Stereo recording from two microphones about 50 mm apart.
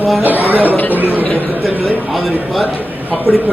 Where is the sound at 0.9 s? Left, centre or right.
Right.